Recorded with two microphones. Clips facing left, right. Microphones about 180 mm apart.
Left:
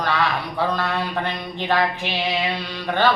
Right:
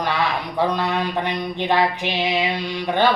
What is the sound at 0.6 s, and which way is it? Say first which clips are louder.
Speech: right 3 dB; 15° right (ahead or behind).